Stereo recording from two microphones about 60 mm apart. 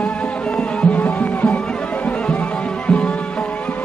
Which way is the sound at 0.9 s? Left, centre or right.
Left.